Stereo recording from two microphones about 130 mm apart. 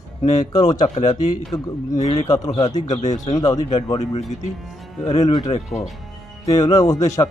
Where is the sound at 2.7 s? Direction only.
65° left (ahead or behind).